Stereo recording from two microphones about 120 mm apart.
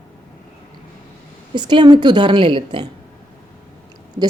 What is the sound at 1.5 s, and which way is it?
A woman's voice, 40° right (ahead or behind).